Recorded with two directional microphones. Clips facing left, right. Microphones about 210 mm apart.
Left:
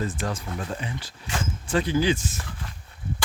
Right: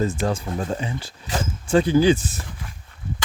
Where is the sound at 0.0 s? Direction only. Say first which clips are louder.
Right 6 dB; 25° right (ahead or behind).